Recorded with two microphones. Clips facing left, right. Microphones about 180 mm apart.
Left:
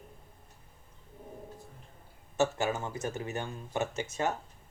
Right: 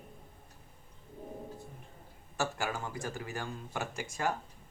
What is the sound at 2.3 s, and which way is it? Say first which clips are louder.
Speech: left 6 dB; 20° left (ahead or behind).